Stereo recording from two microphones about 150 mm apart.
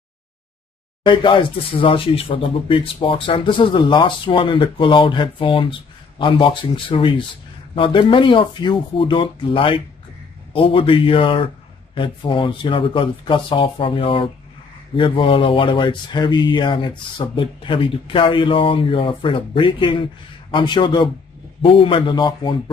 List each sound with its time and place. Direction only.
1.0 s speech: 30° left (ahead or behind)